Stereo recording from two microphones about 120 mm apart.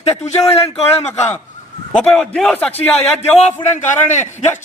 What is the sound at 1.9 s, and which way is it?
Speech, 5° left (ahead or behind).